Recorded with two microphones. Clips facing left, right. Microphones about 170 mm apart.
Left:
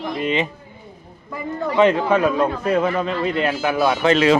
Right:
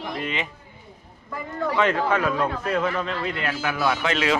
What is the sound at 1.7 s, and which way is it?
A man's voice, 15° left (ahead or behind).